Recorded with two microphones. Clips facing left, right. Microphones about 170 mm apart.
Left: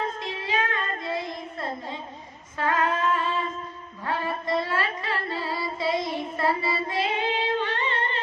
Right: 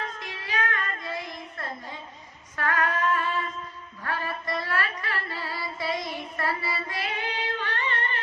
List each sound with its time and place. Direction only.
0.2 s child singing: 25° left (ahead or behind)
2.6 s female singing: 20° left (ahead or behind)